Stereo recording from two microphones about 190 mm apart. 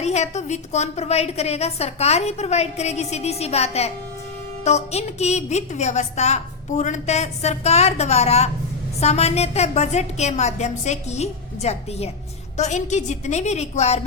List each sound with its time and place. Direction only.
0.0 s a woman's voice: 35° left (ahead or behind)